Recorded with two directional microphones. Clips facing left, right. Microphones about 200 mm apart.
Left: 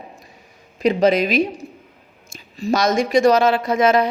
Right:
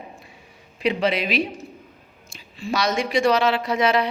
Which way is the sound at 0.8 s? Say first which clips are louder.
Left 6 dB; 45° left (ahead or behind).